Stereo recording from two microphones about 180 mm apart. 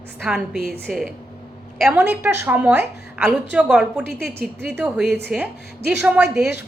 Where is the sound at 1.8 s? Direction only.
10° right (ahead or behind).